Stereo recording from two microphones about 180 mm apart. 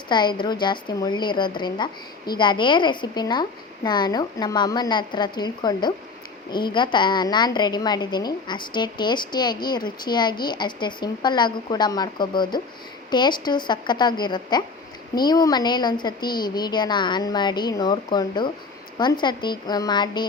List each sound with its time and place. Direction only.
0.1 s a woman's voice: 25° left (ahead or behind)